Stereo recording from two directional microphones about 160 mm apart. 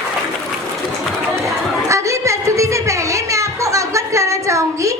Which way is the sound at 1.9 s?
20° right (ahead or behind).